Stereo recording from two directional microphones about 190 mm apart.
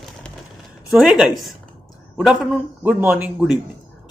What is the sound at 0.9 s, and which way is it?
Speech, centre (ahead or behind).